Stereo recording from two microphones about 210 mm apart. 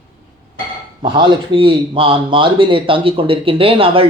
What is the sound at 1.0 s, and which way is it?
Speech, 20° right (ahead or behind).